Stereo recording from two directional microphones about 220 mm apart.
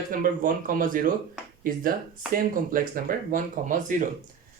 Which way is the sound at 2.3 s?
40° right (ahead or behind).